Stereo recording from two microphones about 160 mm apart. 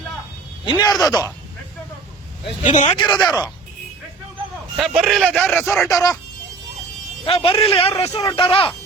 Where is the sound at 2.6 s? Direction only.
50° left (ahead or behind).